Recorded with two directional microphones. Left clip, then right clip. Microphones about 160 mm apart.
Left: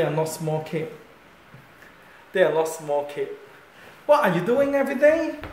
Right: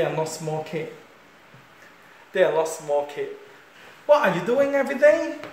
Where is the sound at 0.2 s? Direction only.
25° left (ahead or behind).